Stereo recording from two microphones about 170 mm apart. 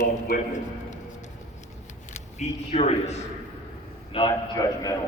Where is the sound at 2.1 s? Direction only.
40° left (ahead or behind).